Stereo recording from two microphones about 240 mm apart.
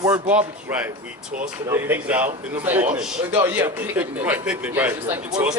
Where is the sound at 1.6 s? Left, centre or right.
Centre.